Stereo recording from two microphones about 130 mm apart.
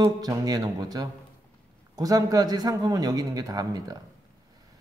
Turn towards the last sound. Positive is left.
turn(degrees=-30)  # may be behind; listen again after turning